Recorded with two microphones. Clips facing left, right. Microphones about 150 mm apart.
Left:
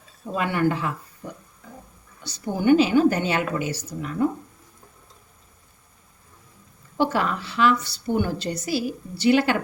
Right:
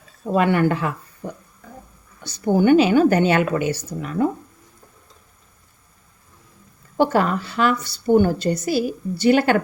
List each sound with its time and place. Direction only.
0.3 s a woman's voice: 65° right (ahead or behind)
1.2 s speech: 50° right (ahead or behind)
2.2 s a woman's voice: 65° right (ahead or behind)
6.9 s speech: 45° right (ahead or behind)